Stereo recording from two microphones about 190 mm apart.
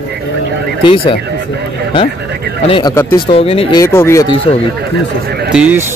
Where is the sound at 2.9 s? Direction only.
15° left (ahead or behind).